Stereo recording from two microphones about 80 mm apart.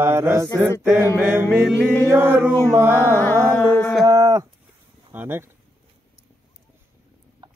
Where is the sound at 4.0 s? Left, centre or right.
Right.